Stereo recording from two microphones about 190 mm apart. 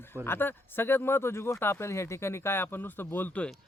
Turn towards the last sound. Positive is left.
turn(degrees=5)  # may be behind; listen again after turning